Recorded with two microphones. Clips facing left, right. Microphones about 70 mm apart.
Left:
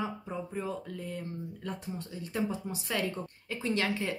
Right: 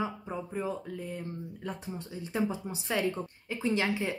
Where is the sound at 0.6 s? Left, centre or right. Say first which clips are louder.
Right 2 dB; centre.